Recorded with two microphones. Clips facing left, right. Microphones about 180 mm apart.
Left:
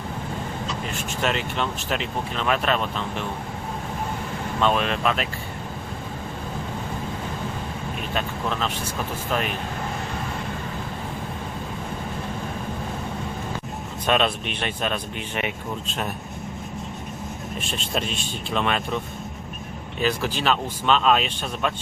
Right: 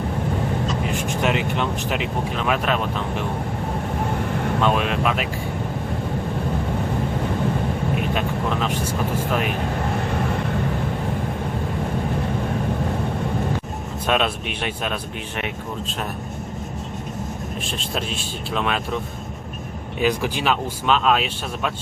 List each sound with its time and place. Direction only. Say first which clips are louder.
0.9 s speech: right 2 dB; 15° right (ahead or behind)
4.6 s speech: even; 10° right (ahead or behind)
8.1 s speech: right 4 dB; 10° right (ahead or behind)
14.1 s speech: even; 5° right (ahead or behind)
17.7 s speech: left 1 dB; centre (ahead or behind)
20.0 s speech: right 3 dB; 15° right (ahead or behind)